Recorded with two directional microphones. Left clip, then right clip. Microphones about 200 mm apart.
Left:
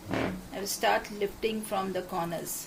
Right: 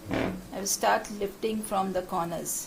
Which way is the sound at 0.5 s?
25° right (ahead or behind).